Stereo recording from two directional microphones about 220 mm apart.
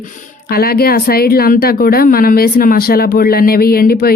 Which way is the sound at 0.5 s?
45° left (ahead or behind).